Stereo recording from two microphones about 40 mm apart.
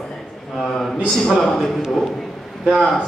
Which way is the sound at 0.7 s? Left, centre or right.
Centre.